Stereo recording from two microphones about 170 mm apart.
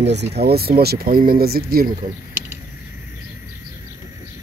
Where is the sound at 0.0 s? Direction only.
85° right; by 1.9 s 60° right (ahead or behind).